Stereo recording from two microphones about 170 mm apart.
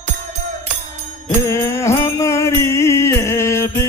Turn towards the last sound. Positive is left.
turn(degrees=15)  # may be behind; listen again after turning